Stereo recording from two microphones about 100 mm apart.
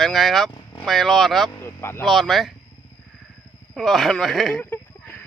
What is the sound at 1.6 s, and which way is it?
Vehicle, 25° left (ahead or behind).